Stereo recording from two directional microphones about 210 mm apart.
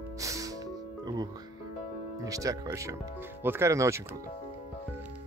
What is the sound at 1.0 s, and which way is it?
Speech, 20° right (ahead or behind).